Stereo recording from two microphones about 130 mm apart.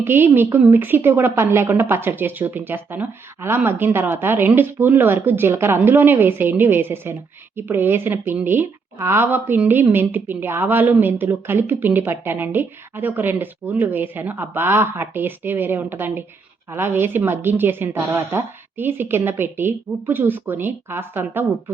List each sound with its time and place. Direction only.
0.0 s a woman's voice: 15° right (ahead or behind)